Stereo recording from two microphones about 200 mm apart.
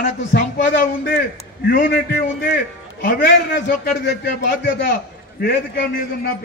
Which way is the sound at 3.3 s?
60° left (ahead or behind).